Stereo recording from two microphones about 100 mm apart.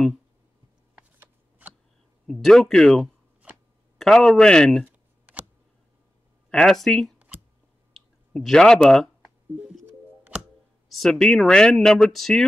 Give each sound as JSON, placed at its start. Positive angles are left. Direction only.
{"t": 2.3, "sound": "speech", "side_deg": 5}
{"t": 4.8, "sound": "a sound", "side_deg": -15}
{"t": 6.5, "sound": "speech", "side_deg": 5}
{"t": 7.2, "sound": "a sound", "side_deg": -15}
{"t": 8.3, "sound": "speech", "side_deg": 5}
{"t": 10.9, "sound": "speech", "side_deg": 5}